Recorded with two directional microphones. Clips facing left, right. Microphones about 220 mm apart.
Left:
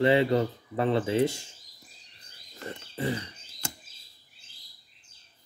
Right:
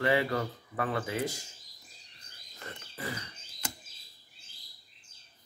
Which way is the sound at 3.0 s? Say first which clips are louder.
Left 9 dB; 25° left (ahead or behind).